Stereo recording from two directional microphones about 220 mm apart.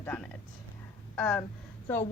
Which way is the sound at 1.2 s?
5° left (ahead or behind).